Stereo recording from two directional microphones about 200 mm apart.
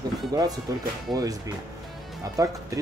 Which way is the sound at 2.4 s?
15° right (ahead or behind).